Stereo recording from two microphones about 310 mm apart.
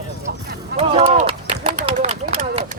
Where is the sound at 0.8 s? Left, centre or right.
Centre.